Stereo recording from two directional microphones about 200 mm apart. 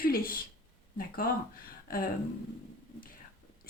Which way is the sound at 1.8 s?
45° left (ahead or behind).